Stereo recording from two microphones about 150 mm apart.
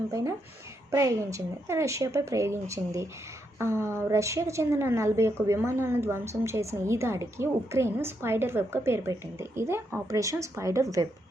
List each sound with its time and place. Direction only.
0.1 s a woman's voice: 20° right (ahead or behind)